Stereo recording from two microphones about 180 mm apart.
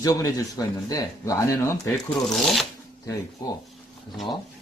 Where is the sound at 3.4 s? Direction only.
20° left (ahead or behind).